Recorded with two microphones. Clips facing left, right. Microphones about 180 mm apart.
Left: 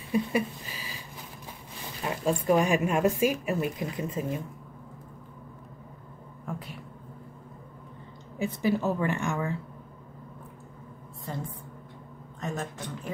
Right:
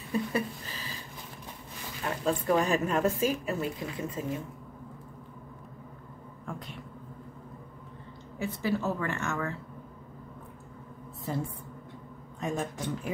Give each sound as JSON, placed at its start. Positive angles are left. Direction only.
{"t": 0.1, "sound": "a woman's voice", "side_deg": 10}
{"t": 2.2, "sound": "a woman's voice", "side_deg": 10}
{"t": 6.4, "sound": "speech", "side_deg": 5}
{"t": 8.4, "sound": "a woman's voice", "side_deg": 15}
{"t": 11.3, "sound": "speech", "side_deg": -5}